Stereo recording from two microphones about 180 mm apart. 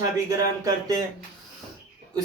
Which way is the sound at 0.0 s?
20° right (ahead or behind).